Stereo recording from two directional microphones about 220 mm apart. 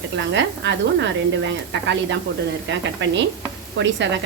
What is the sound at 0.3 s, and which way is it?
Speech, 55° right (ahead or behind).